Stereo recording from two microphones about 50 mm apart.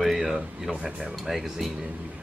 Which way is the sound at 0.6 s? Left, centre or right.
Centre.